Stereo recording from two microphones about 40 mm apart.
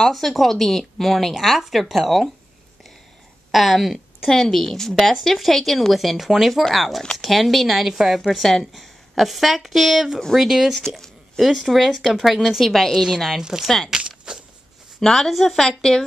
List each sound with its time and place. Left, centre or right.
0.1 s a woman's voice: centre
3.5 s a woman's voice: centre
4.3 s a woman's voice: centre
13.8 s a sound: centre
15.0 s speech: centre